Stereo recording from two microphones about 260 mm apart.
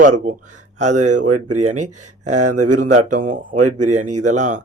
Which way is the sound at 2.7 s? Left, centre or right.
Right.